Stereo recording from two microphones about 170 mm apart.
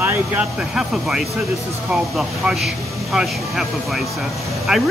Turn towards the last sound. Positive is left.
turn(degrees=0)  # may be behind; listen again after turning